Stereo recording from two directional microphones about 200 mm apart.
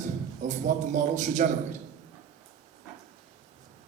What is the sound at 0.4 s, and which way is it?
A man's voice, 35° right (ahead or behind).